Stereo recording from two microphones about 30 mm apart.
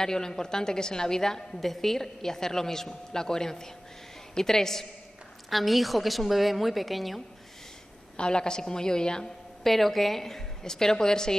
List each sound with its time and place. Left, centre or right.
0.0 s a woman's voice: centre
1.6 s a woman's voice: centre
5.5 s a woman's voice: centre
8.2 s a woman's voice: left
9.6 s a woman's voice: centre